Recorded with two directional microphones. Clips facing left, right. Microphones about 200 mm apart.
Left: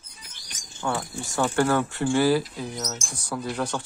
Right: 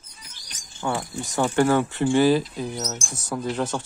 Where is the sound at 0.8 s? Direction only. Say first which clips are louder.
Right 1 dB; 15° right (ahead or behind).